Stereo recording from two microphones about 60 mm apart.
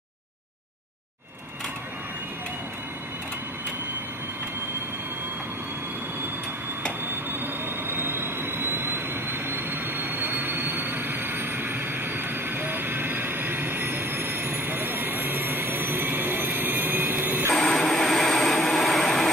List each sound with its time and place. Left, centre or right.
7.1 s vehicle: right
17.6 s vehicle: centre